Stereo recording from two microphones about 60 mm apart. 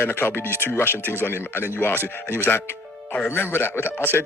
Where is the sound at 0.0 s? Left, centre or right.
Left.